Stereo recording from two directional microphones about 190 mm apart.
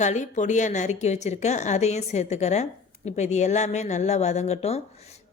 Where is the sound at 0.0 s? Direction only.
40° left (ahead or behind).